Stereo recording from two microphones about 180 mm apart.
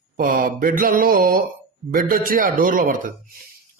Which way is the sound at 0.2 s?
50° right (ahead or behind).